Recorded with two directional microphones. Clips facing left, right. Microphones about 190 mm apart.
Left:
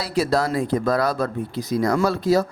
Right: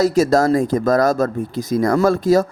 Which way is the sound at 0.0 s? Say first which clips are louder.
Right 7 dB; 45° right (ahead or behind).